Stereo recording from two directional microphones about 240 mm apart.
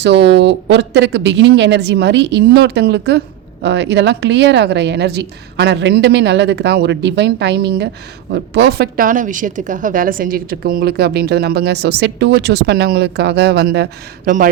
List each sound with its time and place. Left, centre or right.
0.3 s a woman's voice: right